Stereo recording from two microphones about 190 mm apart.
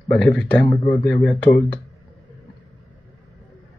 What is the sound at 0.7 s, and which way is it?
Speech, 25° left (ahead or behind).